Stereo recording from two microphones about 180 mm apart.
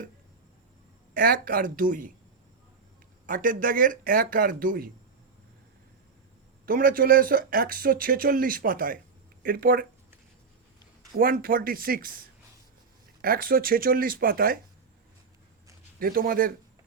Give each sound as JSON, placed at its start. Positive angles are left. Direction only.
{"t": 1.1, "sound": "speech", "side_deg": -50}
{"t": 3.2, "sound": "speech", "side_deg": -50}
{"t": 6.7, "sound": "speech", "side_deg": -50}
{"t": 11.2, "sound": "speech", "side_deg": -55}
{"t": 13.2, "sound": "speech", "side_deg": -55}
{"t": 16.0, "sound": "speech", "side_deg": -55}